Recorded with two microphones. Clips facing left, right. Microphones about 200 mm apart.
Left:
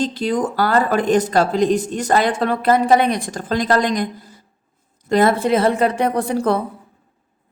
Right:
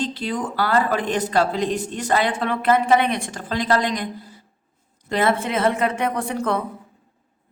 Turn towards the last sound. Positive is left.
turn(degrees=35)  # may be behind; listen again after turning